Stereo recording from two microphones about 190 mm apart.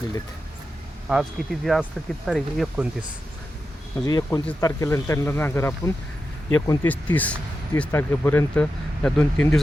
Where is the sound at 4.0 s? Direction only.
20° left (ahead or behind).